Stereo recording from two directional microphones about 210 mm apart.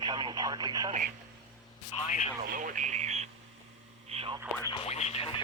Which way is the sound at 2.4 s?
40° right (ahead or behind).